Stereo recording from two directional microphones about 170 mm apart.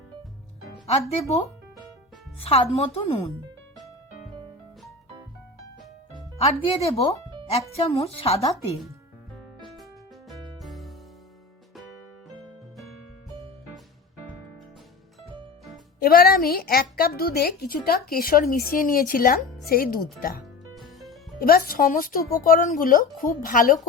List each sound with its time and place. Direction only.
2.4 s speech: 35° left (ahead or behind)
6.4 s speech: 40° left (ahead or behind)
10.6 s music: centre (ahead or behind)
16.0 s a woman's voice: 65° left (ahead or behind)
20.4 s music: centre (ahead or behind)
21.3 s a woman's voice: 60° left (ahead or behind)